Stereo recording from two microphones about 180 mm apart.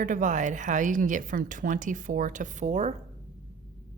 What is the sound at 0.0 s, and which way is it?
Speech, 45° right (ahead or behind).